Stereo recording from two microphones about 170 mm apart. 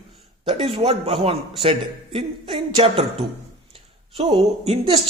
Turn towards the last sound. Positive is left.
turn(degrees=-35)  # may be behind; listen again after turning